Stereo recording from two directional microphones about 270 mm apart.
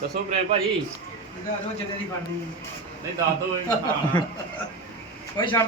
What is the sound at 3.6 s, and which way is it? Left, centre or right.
Speech, centre.